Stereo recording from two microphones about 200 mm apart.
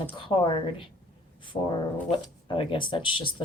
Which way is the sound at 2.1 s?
25° left (ahead or behind).